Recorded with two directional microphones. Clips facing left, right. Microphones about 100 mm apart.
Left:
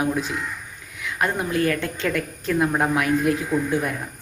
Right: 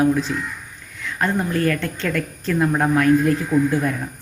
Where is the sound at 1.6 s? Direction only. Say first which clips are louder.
Right 1 dB; 20° left (ahead or behind).